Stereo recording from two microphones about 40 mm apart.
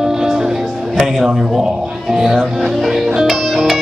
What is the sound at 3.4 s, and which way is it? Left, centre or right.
Music, centre.